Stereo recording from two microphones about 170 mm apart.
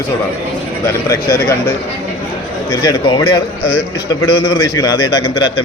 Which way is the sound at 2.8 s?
30° left (ahead or behind).